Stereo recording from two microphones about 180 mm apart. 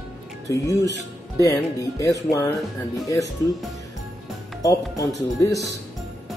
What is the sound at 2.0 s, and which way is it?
Speech, 15° left (ahead or behind).